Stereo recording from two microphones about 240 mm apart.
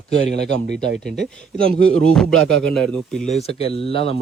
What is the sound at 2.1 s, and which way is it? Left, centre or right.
Speech, centre.